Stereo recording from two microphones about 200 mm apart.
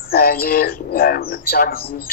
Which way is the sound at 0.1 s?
50° left (ahead or behind).